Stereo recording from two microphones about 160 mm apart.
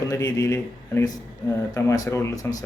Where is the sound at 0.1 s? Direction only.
20° left (ahead or behind).